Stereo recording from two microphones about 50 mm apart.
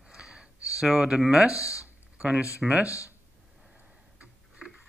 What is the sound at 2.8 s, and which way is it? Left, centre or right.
Speech, left.